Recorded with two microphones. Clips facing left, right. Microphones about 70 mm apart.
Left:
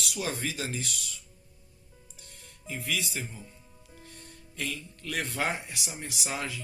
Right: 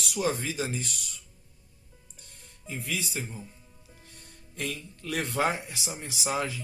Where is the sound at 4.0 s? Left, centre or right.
Left.